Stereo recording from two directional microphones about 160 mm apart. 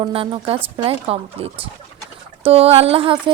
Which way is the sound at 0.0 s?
30° right (ahead or behind).